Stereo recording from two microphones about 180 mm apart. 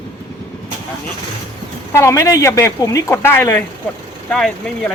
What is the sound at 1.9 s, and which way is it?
Speech, 15° left (ahead or behind).